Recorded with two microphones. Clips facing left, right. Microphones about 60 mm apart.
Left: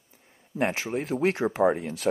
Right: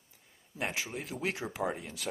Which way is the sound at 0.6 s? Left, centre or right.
Left.